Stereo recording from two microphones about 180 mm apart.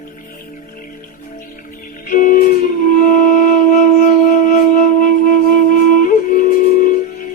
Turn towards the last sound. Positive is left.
turn(degrees=50)  # may be behind; listen again after turning